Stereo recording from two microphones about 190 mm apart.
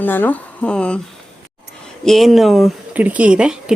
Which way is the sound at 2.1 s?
Centre (ahead or behind).